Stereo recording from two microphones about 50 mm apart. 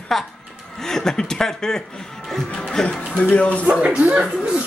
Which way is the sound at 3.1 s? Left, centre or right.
Left.